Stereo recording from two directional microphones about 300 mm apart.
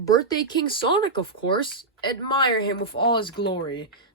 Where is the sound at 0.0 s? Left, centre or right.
Centre.